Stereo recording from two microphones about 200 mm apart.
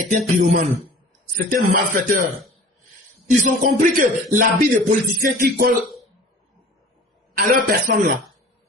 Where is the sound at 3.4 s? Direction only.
40° right (ahead or behind).